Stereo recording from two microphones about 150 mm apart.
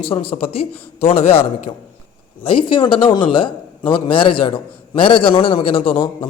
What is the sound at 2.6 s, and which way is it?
A man's voice, 35° left (ahead or behind).